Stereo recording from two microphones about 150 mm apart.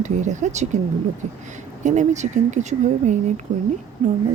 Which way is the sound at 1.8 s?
55° right (ahead or behind).